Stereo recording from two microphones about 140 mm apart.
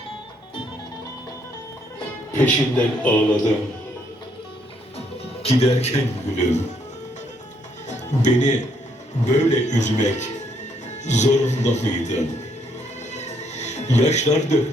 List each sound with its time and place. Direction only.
2.4 s a man's voice: 10° left (ahead or behind)
4.9 s speech: 45° left (ahead or behind)
7.9 s a man's voice: 60° left (ahead or behind)
13.1 s music: 55° left (ahead or behind)